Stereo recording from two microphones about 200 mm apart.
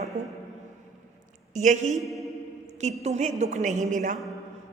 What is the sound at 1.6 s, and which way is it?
Speech, 35° right (ahead or behind).